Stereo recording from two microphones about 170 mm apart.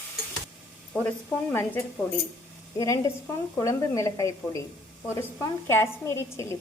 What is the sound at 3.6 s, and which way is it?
A woman's voice, 20° left (ahead or behind).